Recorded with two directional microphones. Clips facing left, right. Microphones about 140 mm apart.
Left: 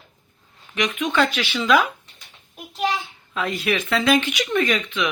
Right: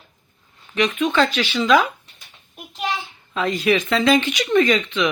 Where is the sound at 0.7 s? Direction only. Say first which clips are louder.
Right 3 dB; 10° left (ahead or behind).